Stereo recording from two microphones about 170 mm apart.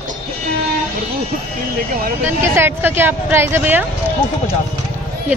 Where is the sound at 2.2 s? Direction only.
15° right (ahead or behind).